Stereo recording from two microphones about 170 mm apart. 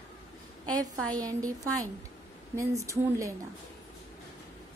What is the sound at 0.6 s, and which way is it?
A woman's voice, 20° right (ahead or behind).